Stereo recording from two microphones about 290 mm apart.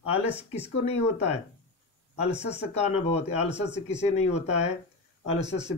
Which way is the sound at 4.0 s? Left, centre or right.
Left.